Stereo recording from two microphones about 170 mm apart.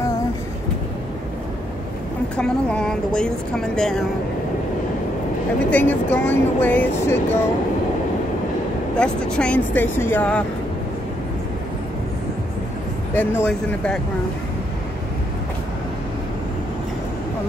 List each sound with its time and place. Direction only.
2.3 s speech: 5° left (ahead or behind)
5.7 s speech: 10° left (ahead or behind)
8.9 s speech: 5° left (ahead or behind)
13.1 s speech: 10° left (ahead or behind)